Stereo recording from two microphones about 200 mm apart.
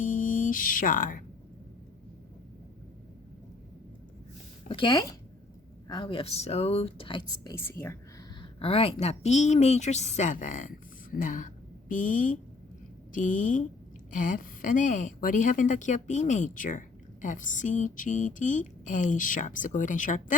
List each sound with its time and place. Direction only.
0.0 s a sound: 40° left (ahead or behind)
4.7 s speech: 25° left (ahead or behind)
7.5 s speech: 10° left (ahead or behind)
8.4 s a woman's voice: 30° left (ahead or behind)